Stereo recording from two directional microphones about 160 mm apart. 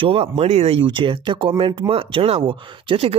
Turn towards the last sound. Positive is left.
turn(degrees=-35)  # may be behind; listen again after turning